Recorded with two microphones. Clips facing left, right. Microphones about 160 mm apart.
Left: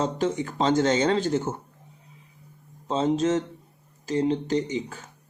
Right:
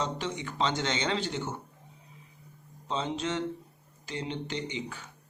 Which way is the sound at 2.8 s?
45° left (ahead or behind).